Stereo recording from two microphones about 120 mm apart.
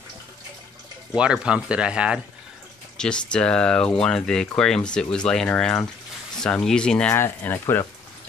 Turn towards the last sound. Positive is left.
turn(degrees=20)  # may be behind; listen again after turning